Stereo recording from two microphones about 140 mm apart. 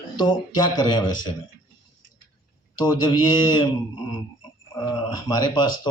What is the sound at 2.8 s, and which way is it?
Speech, 30° left (ahead or behind).